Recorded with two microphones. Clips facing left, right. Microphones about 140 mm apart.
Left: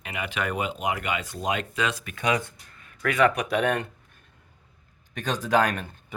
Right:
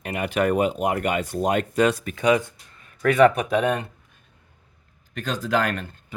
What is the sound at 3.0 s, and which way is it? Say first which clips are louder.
Speech: right 6 dB; 35° right (ahead or behind).